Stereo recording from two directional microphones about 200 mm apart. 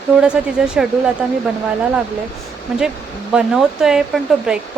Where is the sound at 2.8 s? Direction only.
5° right (ahead or behind).